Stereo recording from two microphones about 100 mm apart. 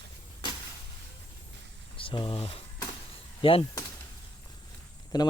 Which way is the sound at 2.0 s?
60° left (ahead or behind).